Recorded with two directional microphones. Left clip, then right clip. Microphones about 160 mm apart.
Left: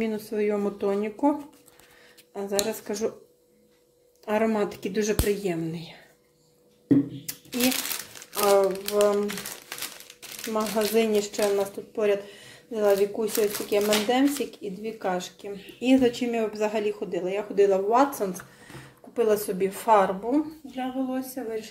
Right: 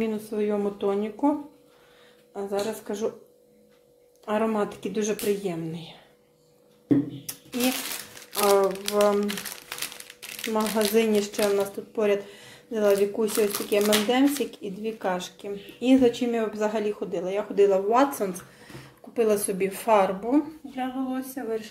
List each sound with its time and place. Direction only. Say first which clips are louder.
0.0 s speech: left 1 dB; 10° left (ahead or behind)
2.9 s speech: even; 15° left (ahead or behind)
4.3 s speech: left 1 dB; 20° left (ahead or behind)
8.3 s speech: even; centre (ahead or behind)
9.7 s crumpling: right 2 dB; 10° right (ahead or behind)
10.5 s speech: right 1 dB; 5° right (ahead or behind)